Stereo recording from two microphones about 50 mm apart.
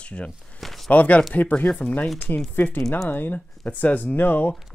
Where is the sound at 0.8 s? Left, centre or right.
Left.